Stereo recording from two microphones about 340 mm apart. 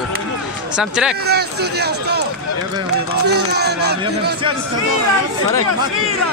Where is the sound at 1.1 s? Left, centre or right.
Right.